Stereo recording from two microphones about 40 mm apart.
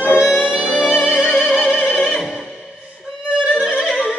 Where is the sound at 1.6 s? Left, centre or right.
Centre.